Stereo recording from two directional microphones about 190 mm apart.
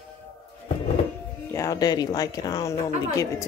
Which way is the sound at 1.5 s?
15° left (ahead or behind).